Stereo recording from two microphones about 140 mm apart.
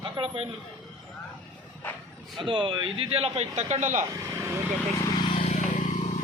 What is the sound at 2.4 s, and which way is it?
A man's voice, 35° right (ahead or behind).